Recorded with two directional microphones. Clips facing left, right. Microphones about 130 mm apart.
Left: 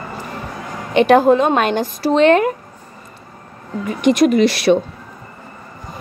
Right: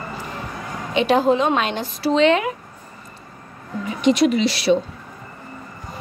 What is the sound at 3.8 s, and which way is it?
Speech, 50° left (ahead or behind).